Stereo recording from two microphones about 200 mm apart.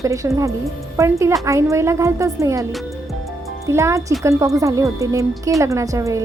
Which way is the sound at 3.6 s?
15° right (ahead or behind).